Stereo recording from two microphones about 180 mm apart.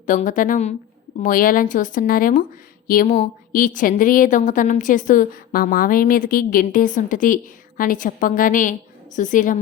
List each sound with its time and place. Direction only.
0.0 s a woman's voice: 45° left (ahead or behind)